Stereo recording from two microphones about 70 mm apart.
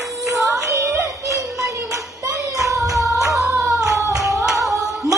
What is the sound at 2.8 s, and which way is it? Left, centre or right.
Music, centre.